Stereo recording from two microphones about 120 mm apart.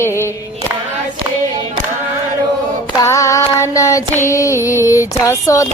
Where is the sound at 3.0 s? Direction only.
25° left (ahead or behind).